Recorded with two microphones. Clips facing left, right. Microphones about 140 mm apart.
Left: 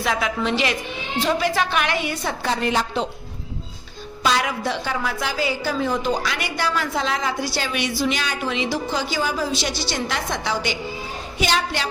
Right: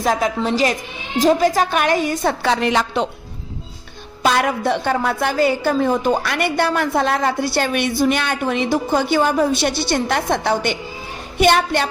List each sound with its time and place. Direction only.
0.0 s a woman's voice: 40° right (ahead or behind)
2.4 s a woman's voice: 75° right (ahead or behind)
4.2 s a woman's voice: 55° right (ahead or behind)